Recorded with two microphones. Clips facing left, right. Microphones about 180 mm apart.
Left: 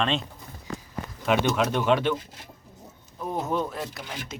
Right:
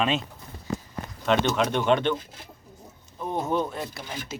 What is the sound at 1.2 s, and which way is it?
Speech, 5° left (ahead or behind).